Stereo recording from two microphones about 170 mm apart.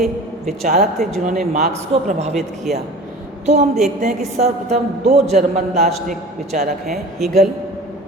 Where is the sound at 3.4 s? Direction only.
40° right (ahead or behind).